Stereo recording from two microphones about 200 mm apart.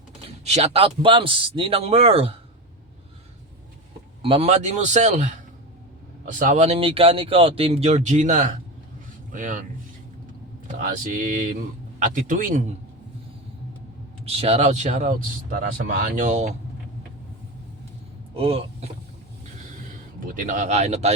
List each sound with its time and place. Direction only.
0.3 s a man's voice: 30° right (ahead or behind)
4.2 s speech: 30° right (ahead or behind)
6.4 s speech: 35° right (ahead or behind)
10.8 s speech: 40° right (ahead or behind)
14.3 s speech: 30° right (ahead or behind)
18.3 s speech: 30° right (ahead or behind)
20.1 s speech: 40° right (ahead or behind)